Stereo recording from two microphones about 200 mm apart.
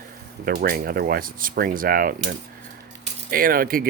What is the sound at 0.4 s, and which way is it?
Speech, 50° right (ahead or behind).